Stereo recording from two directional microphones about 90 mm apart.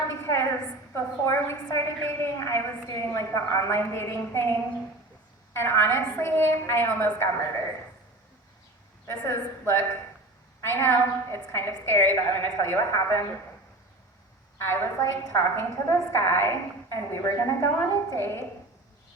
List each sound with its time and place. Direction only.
0.1 s a sound: 30° left (ahead or behind)
0.9 s a woman's voice: 25° left (ahead or behind)
5.5 s a woman's voice: 25° left (ahead or behind)
9.0 s a woman's voice: 30° left (ahead or behind)
14.6 s a woman's voice: 25° left (ahead or behind)